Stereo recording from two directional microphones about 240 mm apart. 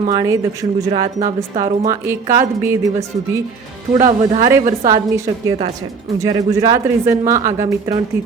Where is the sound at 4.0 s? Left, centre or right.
Right.